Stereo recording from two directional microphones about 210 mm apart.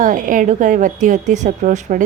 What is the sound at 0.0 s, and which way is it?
A woman's voice, 40° right (ahead or behind).